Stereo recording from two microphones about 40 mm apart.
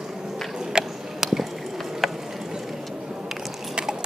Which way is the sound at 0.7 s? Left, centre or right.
Centre.